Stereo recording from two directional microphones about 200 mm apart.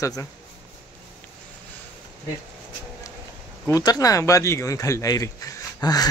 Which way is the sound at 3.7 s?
15° left (ahead or behind).